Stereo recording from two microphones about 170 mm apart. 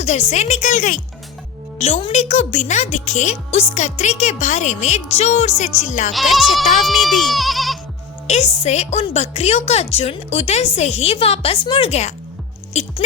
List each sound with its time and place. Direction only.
0.0 s a woman's voice: 40° left (ahead or behind)
1.8 s a woman's voice: 35° left (ahead or behind)
6.1 s speech: centre (ahead or behind)
8.3 s speech: 40° left (ahead or behind)
12.7 s rodents: 40° left (ahead or behind)